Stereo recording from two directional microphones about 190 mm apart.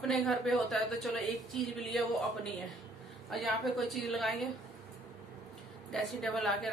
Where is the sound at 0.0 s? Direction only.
Centre (ahead or behind).